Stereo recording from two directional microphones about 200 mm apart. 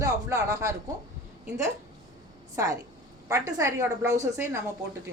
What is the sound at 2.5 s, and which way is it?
A woman's voice, 15° right (ahead or behind).